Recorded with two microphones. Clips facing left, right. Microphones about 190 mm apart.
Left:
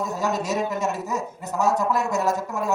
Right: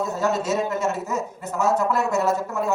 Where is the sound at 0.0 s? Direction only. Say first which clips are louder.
Right 2 dB; 15° left (ahead or behind).